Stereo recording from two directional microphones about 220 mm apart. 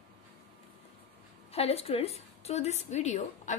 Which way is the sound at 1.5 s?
30° left (ahead or behind).